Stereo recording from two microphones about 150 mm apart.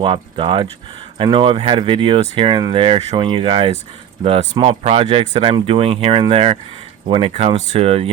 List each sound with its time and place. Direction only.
0.0 s speech: 35° right (ahead or behind)
4.2 s speech: 50° right (ahead or behind)
4.5 s speech: 35° right (ahead or behind)